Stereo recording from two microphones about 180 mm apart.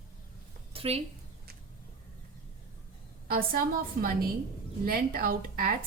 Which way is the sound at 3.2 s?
55° right (ahead or behind).